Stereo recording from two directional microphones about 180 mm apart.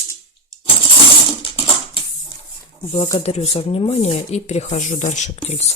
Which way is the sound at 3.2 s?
35° left (ahead or behind).